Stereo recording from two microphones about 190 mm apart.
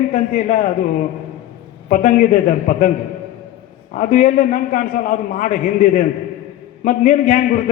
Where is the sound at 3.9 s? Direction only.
45° left (ahead or behind).